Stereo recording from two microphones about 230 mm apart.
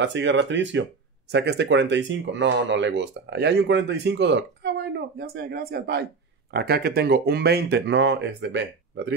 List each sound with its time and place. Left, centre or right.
0.0 s speech: right